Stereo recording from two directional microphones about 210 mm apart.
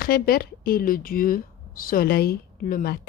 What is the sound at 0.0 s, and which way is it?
Speech, 45° left (ahead or behind).